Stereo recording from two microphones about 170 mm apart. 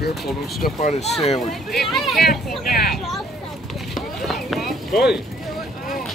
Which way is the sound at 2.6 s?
65° left (ahead or behind).